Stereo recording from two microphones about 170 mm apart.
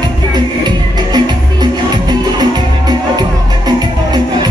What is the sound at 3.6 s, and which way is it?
Music, 25° right (ahead or behind).